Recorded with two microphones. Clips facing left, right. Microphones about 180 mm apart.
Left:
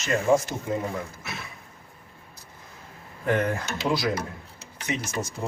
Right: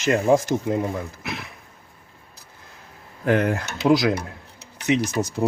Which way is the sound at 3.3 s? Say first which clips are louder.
Right 4 dB; 90° right.